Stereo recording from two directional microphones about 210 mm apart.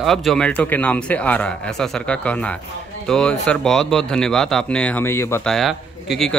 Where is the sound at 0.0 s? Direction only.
Centre (ahead or behind).